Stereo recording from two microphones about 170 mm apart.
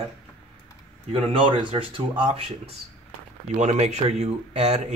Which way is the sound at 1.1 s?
30° right (ahead or behind).